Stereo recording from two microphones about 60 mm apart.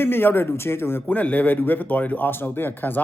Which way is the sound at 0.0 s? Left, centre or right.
Left.